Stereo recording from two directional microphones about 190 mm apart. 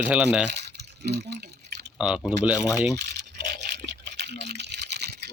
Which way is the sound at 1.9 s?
5° right (ahead or behind).